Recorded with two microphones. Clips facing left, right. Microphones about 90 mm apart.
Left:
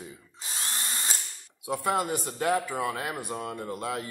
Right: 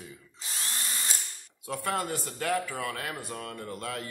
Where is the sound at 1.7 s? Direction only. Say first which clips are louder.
Left 4 dB; 15° left (ahead or behind).